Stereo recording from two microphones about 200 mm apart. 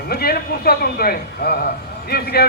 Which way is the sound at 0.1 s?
50° left (ahead or behind).